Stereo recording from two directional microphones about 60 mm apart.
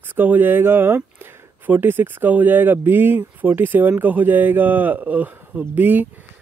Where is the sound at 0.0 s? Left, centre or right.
Right.